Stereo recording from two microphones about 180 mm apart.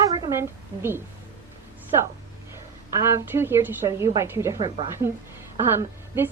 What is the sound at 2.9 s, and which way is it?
Speech, 15° right (ahead or behind).